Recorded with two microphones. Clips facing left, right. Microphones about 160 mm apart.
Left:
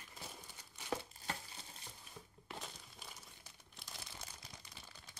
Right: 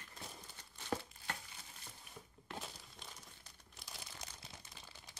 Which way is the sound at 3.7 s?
Centre (ahead or behind).